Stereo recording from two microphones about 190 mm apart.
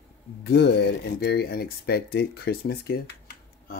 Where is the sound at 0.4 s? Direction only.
65° left (ahead or behind).